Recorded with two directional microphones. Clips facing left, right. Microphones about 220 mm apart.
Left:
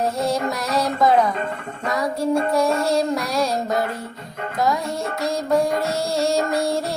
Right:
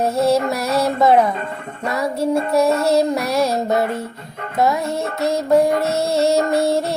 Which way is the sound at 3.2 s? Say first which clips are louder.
Right 4 dB; 25° right (ahead or behind).